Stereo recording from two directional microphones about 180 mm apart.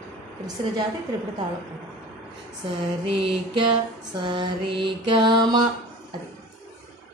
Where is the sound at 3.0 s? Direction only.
30° right (ahead or behind).